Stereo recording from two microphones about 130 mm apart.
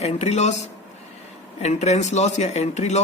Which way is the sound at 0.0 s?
55° left (ahead or behind).